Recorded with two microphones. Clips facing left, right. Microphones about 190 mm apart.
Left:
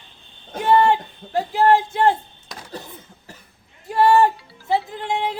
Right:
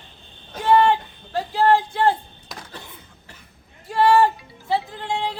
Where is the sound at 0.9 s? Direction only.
20° left (ahead or behind).